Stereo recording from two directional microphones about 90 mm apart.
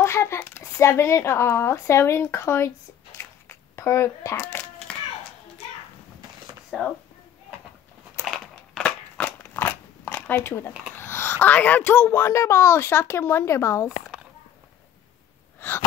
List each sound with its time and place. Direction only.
0.0 s speech: 30° left (ahead or behind)
3.2 s a sound: 30° left (ahead or behind)
6.7 s speech: 10° right (ahead or behind)
8.3 s crushing: 5° left (ahead or behind)
9.4 s crunch: 25° left (ahead or behind)
10.1 s speech: 20° left (ahead or behind)